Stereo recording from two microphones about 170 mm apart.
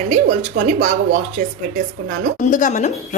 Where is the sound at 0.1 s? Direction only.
45° right (ahead or behind).